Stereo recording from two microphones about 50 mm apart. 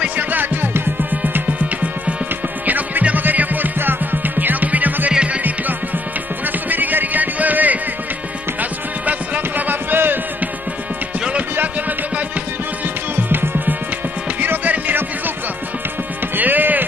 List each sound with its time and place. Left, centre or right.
0.1 s music: right
5.1 s music: right
6.4 s music: right
11.1 s music: right
13.1 s music: right
16.3 s music: right